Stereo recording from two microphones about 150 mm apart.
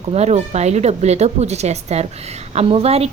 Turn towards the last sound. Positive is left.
turn(degrees=-45)  # may be behind; listen again after turning